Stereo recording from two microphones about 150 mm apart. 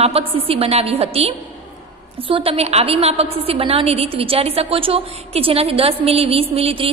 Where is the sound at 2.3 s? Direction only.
40° right (ahead or behind).